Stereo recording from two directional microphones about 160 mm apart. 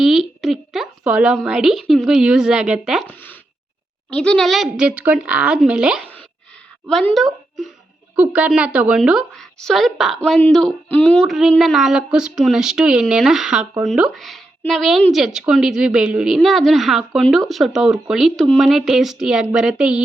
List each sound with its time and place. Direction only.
0.0 s a woman's voice: centre (ahead or behind)
4.1 s a woman's voice: 5° left (ahead or behind)